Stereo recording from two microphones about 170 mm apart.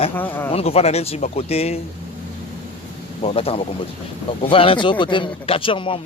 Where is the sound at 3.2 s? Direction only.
35° left (ahead or behind).